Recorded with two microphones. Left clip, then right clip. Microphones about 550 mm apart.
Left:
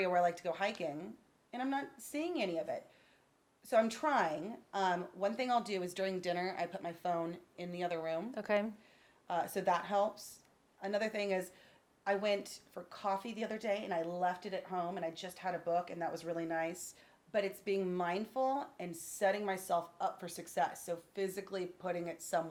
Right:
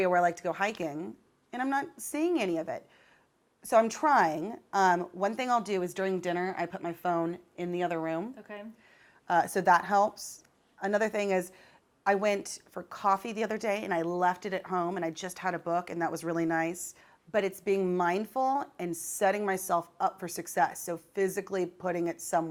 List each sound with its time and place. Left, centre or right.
0.0 s speech: right
8.4 s speech: left
9.2 s a woman's voice: right